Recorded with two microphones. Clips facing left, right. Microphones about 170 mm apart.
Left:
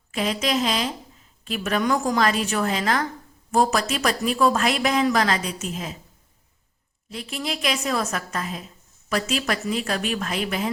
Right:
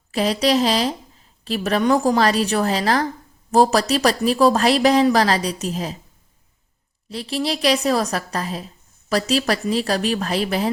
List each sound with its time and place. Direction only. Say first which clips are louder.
0.1 s speech: right 6 dB; 35° right (ahead or behind)
7.1 s speech: right 6 dB; 35° right (ahead or behind)